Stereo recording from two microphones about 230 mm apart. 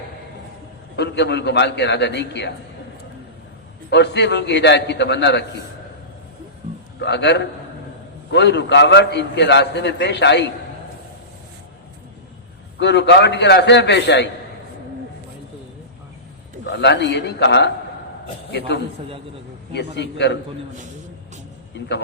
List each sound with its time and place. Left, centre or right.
0.9 s a man's voice: left
3.8 s a man's voice: left
7.0 s a man's voice: left
12.8 s a man's voice: left
16.6 s a man's voice: left
19.7 s a man's voice: left
21.7 s a man's voice: left